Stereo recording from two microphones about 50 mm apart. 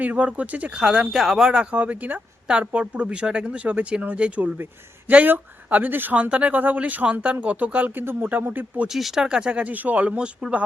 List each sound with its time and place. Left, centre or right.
0.0 s speech: right
0.7 s speech: centre
1.5 s speech: right
4.5 s speech: right
5.1 s speech: right
6.1 s speech: right
8.9 s speech: centre
9.2 s speech: centre
10.1 s speech: centre